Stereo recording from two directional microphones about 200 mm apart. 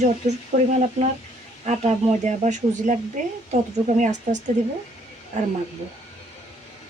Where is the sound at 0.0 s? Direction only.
35° right (ahead or behind).